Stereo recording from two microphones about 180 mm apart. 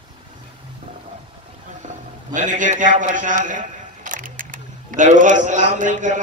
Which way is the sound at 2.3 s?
45° right (ahead or behind).